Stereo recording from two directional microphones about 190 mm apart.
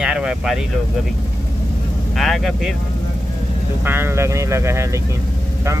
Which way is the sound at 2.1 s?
Centre (ahead or behind).